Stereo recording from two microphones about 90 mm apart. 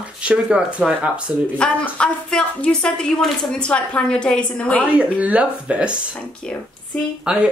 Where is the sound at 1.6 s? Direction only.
10° left (ahead or behind).